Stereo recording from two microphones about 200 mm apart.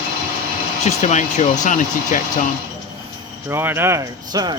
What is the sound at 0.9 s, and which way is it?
Speech, 35° left (ahead or behind).